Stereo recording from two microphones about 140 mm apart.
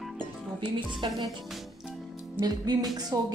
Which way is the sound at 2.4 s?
30° right (ahead or behind).